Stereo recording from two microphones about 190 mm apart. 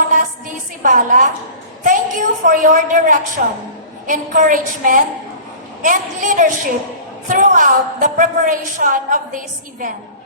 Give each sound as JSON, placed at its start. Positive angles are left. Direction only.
{"t": 0.8, "sound": "a woman's voice", "side_deg": -45}